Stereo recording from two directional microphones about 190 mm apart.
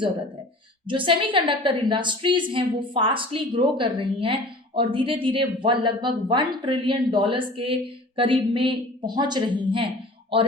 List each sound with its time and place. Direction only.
0.9 s a woman's voice: 25° right (ahead or behind)